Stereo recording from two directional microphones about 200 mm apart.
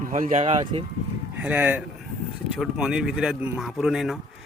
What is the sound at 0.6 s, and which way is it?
Speech, 25° right (ahead or behind).